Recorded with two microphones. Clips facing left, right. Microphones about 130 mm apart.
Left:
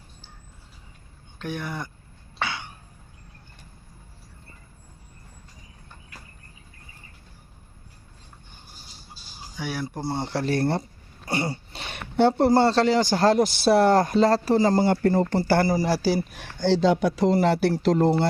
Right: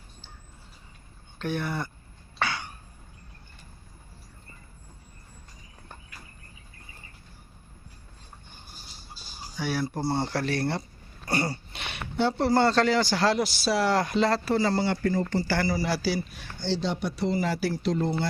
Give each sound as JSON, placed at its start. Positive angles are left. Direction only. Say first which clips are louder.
{"t": 1.4, "sound": "speech", "louder": "right 2 dB", "side_deg": 10}
{"t": 9.6, "sound": "speech", "louder": "right 2 dB", "side_deg": 15}
{"t": 10.4, "sound": "speech", "louder": "left 4 dB", "side_deg": 45}
{"t": 11.3, "sound": "throat clearing", "louder": "left 1 dB", "side_deg": 20}
{"t": 11.7, "sound": "a sound", "louder": "left 1 dB", "side_deg": 35}
{"t": 11.9, "sound": "a sound", "louder": "left 6 dB", "side_deg": 55}
{"t": 12.5, "sound": "speech", "louder": "left 3 dB", "side_deg": 30}
{"t": 15.2, "sound": "speech", "louder": "left 6 dB", "side_deg": 60}
{"t": 16.3, "sound": "speech", "louder": "left 8 dB", "side_deg": 75}